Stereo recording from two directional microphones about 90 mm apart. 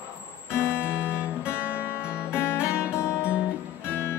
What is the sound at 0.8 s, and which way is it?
Music, 15° right (ahead or behind).